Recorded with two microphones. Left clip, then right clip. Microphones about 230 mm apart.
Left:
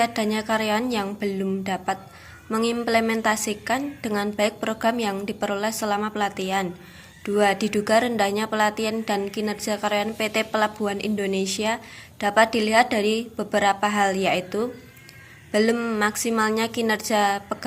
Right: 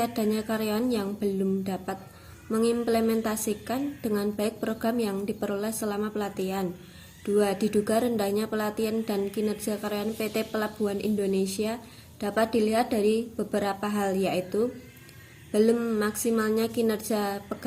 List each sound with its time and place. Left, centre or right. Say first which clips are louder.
0.0 s a woman's voice: left 5 dB; centre
7.3 s a woman's voice: left 4 dB; centre